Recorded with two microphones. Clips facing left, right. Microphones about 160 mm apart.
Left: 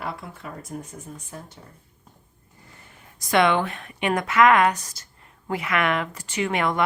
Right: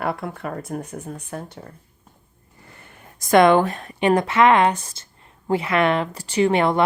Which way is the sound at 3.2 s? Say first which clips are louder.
Right 6 dB; 45° right (ahead or behind).